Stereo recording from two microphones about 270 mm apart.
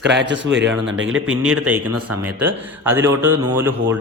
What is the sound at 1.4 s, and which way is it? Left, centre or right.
A man's voice, centre.